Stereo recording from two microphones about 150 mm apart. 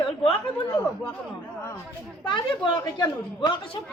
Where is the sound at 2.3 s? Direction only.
30° left (ahead or behind).